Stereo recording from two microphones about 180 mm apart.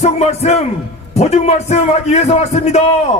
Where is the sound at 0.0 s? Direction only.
35° left (ahead or behind).